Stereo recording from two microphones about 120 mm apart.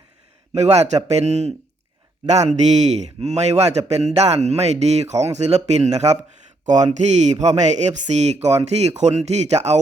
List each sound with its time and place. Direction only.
0.5 s a man's voice: 65° right (ahead or behind)